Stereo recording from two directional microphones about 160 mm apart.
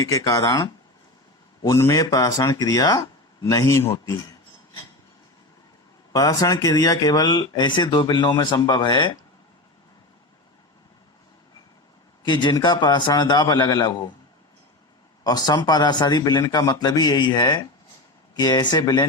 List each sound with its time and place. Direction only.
0.0 s speech: 20° left (ahead or behind)
6.1 s speech: 20° left (ahead or behind)
12.2 s speech: 25° left (ahead or behind)
15.2 s speech: 25° left (ahead or behind)